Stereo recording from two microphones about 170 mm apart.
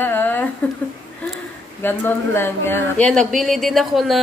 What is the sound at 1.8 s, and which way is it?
Speech, 15° left (ahead or behind).